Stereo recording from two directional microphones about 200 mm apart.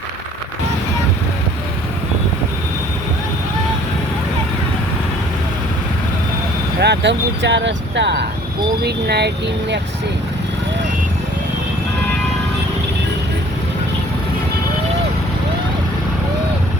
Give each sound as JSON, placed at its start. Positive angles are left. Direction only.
{"t": 6.7, "sound": "speech", "side_deg": -55}